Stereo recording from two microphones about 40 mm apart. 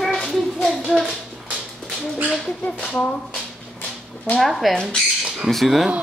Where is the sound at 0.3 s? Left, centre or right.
Centre.